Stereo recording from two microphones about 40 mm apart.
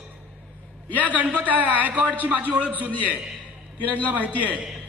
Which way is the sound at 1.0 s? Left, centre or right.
Right.